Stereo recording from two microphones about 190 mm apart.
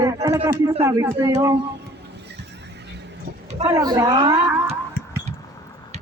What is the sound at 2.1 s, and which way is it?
Horse, 60° right (ahead or behind).